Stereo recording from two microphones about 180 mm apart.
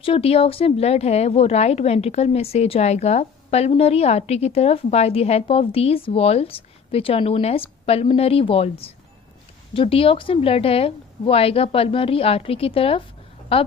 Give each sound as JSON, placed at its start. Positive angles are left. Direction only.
{"t": 0.0, "sound": "speech", "side_deg": 30}
{"t": 9.7, "sound": "speech", "side_deg": 30}